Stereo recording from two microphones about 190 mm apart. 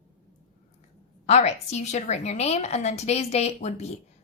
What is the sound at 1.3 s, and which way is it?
A woman's voice, 35° left (ahead or behind).